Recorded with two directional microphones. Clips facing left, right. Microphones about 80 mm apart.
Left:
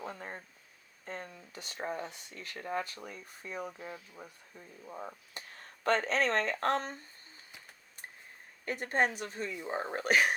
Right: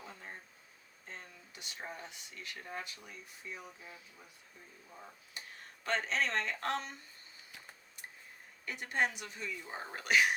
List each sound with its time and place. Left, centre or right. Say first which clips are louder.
0.0 s a sound: left 7 dB; left
1.0 s speech: left 8 dB; left
8.6 s speech: left 4 dB; left